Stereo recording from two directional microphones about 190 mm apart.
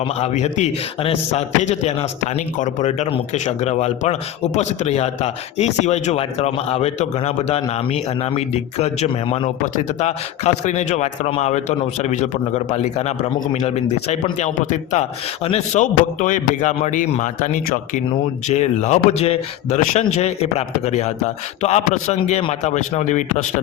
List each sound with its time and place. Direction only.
0.0 s a man's voice: 35° left (ahead or behind)